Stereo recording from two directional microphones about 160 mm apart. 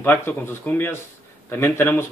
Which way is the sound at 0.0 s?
10° left (ahead or behind).